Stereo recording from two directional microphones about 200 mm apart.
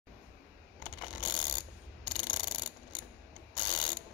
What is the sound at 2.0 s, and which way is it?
Ratchet, 20° left (ahead or behind).